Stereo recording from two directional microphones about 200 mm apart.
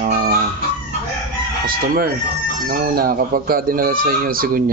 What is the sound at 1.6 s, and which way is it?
Speech, 45° right (ahead or behind).